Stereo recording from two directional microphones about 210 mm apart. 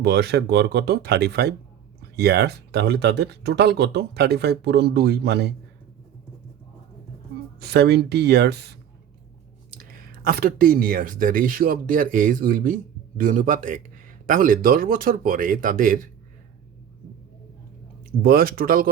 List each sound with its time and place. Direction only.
0.0 s speech: 55° right (ahead or behind)
7.6 s speech: 50° right (ahead or behind)
10.2 s speech: 45° right (ahead or behind)
18.2 s speech: 45° right (ahead or behind)